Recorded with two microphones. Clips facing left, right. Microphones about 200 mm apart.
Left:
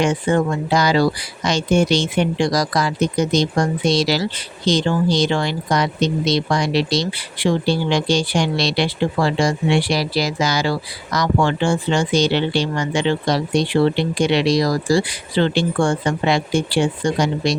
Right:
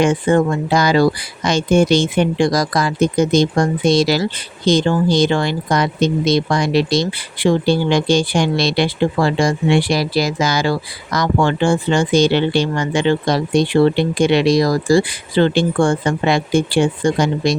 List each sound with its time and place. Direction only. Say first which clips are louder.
0.0 s speech: right 3 dB; 50° right (ahead or behind)